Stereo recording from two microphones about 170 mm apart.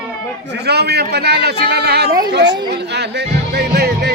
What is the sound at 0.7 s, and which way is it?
Speech, 75° right (ahead or behind).